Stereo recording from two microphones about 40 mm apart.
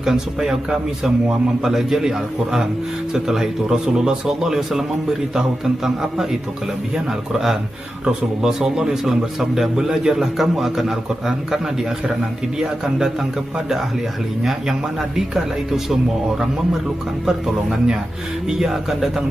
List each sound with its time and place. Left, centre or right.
0.0 s a man's voice: centre
8.4 s a man's voice: centre
9.8 s a man's voice: centre
10.3 s a man's voice: centre
14.7 s a man's voice: centre